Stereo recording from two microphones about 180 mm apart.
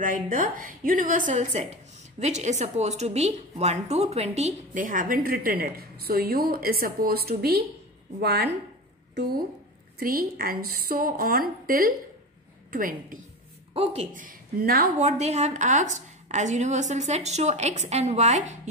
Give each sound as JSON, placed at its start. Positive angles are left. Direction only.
{"t": 0.0, "sound": "a woman's voice", "side_deg": -50}
{"t": 9.9, "sound": "a woman's voice", "side_deg": -55}
{"t": 15.0, "sound": "a woman's voice", "side_deg": -40}